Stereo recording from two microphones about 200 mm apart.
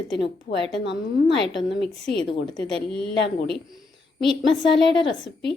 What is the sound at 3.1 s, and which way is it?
Speech, 60° left (ahead or behind).